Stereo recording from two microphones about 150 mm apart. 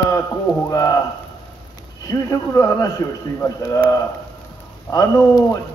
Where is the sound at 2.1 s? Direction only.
20° left (ahead or behind).